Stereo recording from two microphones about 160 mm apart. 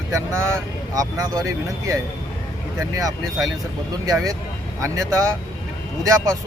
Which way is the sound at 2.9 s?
20° right (ahead or behind).